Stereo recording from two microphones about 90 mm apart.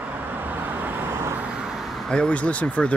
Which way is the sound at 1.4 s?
10° right (ahead or behind).